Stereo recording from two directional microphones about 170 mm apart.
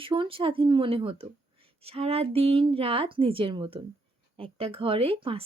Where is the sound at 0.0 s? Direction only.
30° right (ahead or behind).